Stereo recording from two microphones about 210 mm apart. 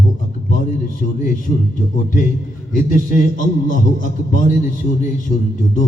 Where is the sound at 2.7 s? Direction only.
40° left (ahead or behind).